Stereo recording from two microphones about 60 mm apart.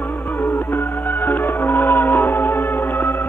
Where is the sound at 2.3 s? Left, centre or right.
Left.